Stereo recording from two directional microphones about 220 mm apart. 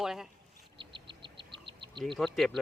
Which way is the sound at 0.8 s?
20° right (ahead or behind).